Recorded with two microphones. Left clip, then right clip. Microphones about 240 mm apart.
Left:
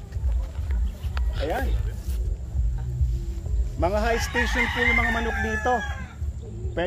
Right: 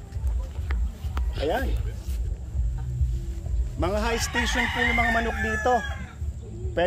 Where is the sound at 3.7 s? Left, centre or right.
Right.